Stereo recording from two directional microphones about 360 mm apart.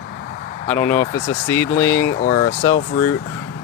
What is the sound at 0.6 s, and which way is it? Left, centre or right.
Speech, centre.